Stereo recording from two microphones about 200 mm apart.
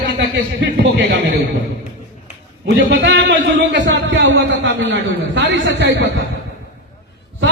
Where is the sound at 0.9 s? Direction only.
60° right (ahead or behind).